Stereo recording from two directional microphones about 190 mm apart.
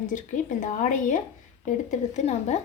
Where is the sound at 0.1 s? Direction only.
40° left (ahead or behind).